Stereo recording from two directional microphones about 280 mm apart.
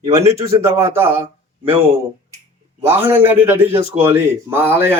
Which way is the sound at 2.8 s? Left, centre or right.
Centre.